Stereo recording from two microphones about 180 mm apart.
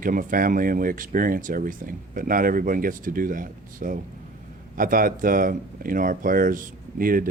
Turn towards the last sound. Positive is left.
turn(degrees=-50)  # may be behind; listen again after turning